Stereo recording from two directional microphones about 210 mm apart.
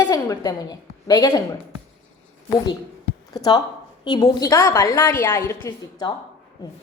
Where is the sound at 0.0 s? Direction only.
15° left (ahead or behind).